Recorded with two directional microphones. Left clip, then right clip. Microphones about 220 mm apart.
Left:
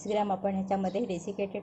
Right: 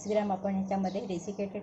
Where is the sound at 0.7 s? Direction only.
45° left (ahead or behind).